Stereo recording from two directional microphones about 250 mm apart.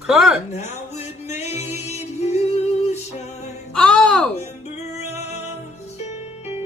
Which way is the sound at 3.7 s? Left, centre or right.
Centre.